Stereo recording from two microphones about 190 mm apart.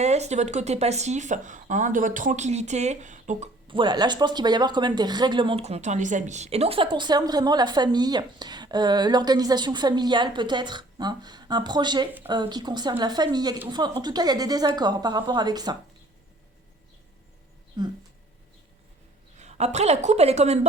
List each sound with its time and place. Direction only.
0.0 s speech: 35° right (ahead or behind)
3.7 s speech: 25° right (ahead or behind)
17.8 s speech: 20° right (ahead or behind)
19.4 s a woman's voice: 35° right (ahead or behind)